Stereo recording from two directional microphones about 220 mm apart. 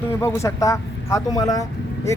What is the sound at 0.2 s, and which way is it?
Speech, 15° left (ahead or behind).